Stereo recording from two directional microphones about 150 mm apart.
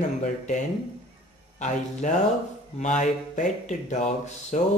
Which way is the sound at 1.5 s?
55° left (ahead or behind).